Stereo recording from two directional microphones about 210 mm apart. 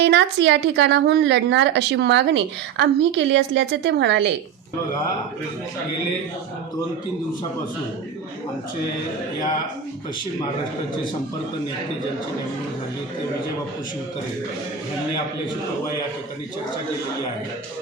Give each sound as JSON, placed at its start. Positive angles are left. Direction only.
{"t": 0.0, "sound": "speech", "side_deg": -55}